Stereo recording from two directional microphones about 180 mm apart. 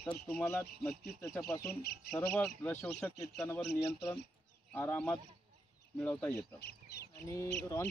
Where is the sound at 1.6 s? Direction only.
60° left (ahead or behind).